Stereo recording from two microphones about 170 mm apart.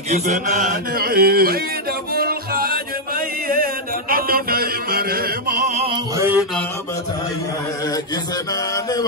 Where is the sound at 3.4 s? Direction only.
60° right (ahead or behind).